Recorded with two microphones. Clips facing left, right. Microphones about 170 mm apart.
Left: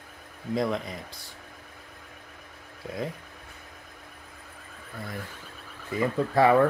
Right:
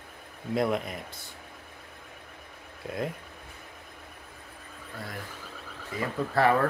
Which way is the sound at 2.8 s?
Centre (ahead or behind).